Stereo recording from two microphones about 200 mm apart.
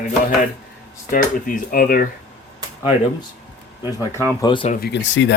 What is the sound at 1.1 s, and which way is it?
Speech, 45° left (ahead or behind).